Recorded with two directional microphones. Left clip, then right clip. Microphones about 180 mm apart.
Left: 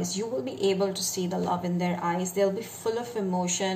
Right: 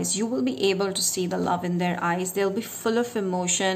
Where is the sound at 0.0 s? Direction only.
45° right (ahead or behind).